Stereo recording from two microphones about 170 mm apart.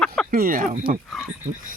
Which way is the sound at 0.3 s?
55° right (ahead or behind).